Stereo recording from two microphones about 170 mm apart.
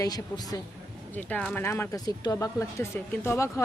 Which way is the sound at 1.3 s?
5° left (ahead or behind).